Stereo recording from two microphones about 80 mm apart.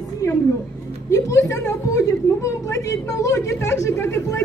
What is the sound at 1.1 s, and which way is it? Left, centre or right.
A woman's voice, left.